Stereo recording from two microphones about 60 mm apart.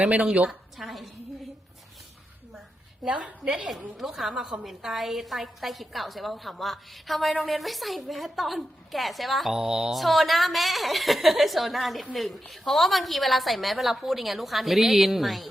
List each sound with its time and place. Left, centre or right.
0.0 s a woman's voice: centre
0.8 s a sound: centre
3.0 s a woman's voice: centre
3.9 s a woman's voice: centre